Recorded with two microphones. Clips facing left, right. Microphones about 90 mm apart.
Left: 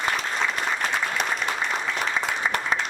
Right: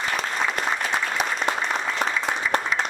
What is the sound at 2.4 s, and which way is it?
Applause, 30° left (ahead or behind).